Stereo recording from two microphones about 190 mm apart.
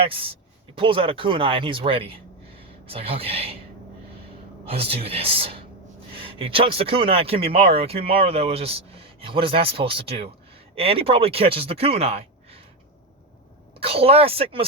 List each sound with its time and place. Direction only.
0.0 s speech: 30° right (ahead or behind)
4.6 s speech: 30° right (ahead or behind)
13.7 s speech: 30° right (ahead or behind)